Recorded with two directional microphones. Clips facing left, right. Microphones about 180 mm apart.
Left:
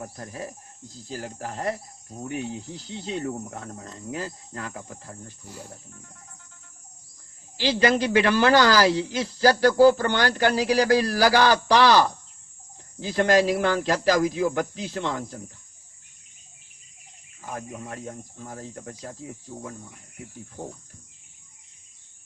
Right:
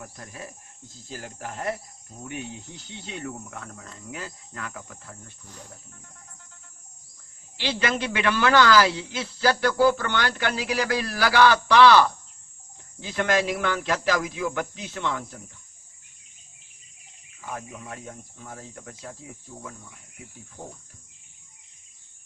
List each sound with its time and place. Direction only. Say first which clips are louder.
0.0 s speech: left 5 dB; 35° left (ahead or behind)
7.5 s speech: left 6 dB; 35° left (ahead or behind)
17.4 s speech: left 2 dB; 40° left (ahead or behind)